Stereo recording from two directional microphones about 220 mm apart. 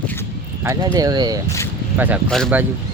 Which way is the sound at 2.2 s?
5° left (ahead or behind).